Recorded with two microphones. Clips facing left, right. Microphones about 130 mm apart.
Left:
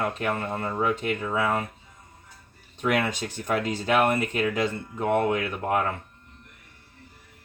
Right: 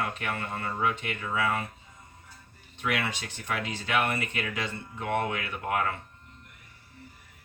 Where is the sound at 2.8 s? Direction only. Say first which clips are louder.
Left 6 dB; 45° left (ahead or behind).